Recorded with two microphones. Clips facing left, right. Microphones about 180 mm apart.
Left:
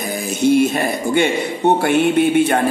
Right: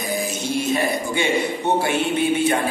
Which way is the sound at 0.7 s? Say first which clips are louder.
Left 5 dB; 55° left (ahead or behind).